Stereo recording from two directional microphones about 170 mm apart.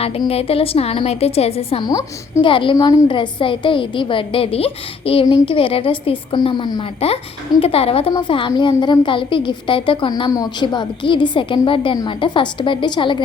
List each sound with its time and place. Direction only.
0.3 s a woman's voice: 35° left (ahead or behind)